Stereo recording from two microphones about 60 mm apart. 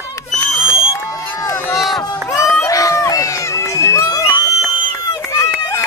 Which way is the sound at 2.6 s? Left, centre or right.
Left.